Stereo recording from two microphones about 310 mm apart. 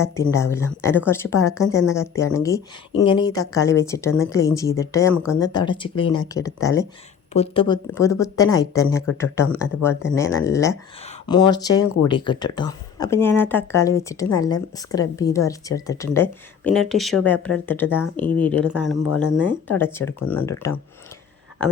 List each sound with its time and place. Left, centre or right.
0.0 s speech: centre